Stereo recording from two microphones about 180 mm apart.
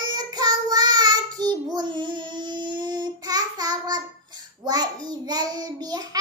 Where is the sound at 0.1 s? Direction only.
20° right (ahead or behind).